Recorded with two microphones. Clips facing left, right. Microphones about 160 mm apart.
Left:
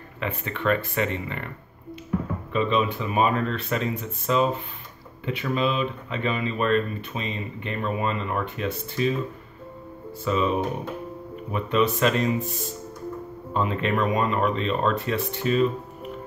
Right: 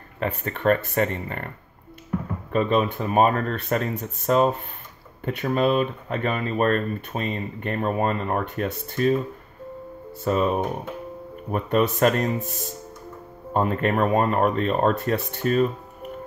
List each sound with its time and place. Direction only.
0.2 s speech: 45° right (ahead or behind)
2.5 s speech: 45° right (ahead or behind)
10.2 s speech: 45° right (ahead or behind)